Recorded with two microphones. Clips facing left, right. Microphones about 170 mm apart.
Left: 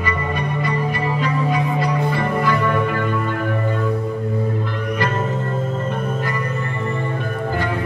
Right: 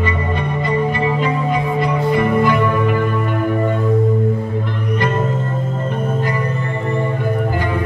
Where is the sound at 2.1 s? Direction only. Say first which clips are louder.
Right 5 dB; 20° right (ahead or behind).